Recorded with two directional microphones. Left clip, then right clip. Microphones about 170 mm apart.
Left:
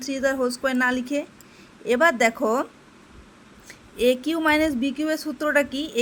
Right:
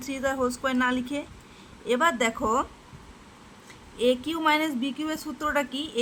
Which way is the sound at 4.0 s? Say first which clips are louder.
Left 3 dB; 20° left (ahead or behind).